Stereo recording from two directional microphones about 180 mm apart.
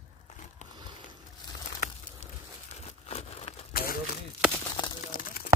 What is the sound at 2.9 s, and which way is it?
Crumpling, 35° left (ahead or behind).